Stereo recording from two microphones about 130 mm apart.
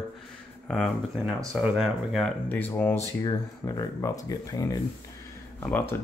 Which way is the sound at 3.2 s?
30° left (ahead or behind).